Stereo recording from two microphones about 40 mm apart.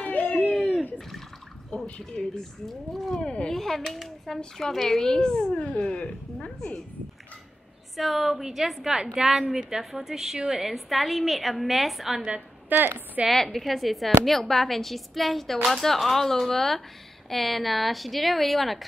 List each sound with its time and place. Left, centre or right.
0.0 s a sound: left
1.7 s a woman's voice: left
3.4 s a woman's voice: centre
7.9 s speech: centre
8.9 s a woman's voice: centre
10.6 s speech: centre
12.6 s a woman's voice: right
13.3 s speech: centre